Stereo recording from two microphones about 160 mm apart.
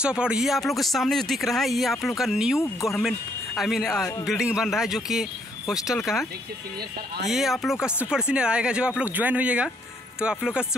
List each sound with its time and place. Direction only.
0.0 s speech: 5° right (ahead or behind)
2.6 s speech: 15° left (ahead or behind)
3.0 s speech: centre (ahead or behind)
7.2 s speech: centre (ahead or behind)